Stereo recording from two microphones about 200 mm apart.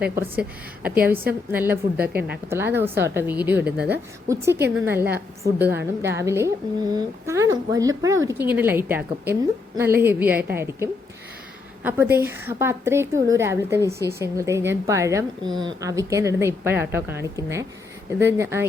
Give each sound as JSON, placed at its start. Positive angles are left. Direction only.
{"t": 0.0, "sound": "a woman's voice", "side_deg": -10}